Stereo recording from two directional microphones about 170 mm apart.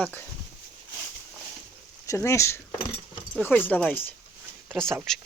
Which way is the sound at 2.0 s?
15° left (ahead or behind).